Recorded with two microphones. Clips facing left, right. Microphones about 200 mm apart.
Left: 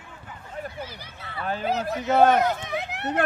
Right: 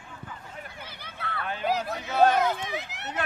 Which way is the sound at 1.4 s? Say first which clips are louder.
Left 4 dB; 40° left (ahead or behind).